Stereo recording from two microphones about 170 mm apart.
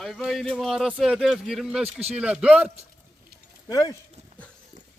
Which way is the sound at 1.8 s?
35° right (ahead or behind).